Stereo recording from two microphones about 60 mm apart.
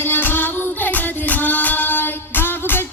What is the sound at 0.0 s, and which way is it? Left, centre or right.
Music, left.